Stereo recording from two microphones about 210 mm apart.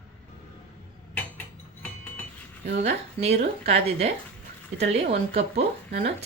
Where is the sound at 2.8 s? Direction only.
30° right (ahead or behind).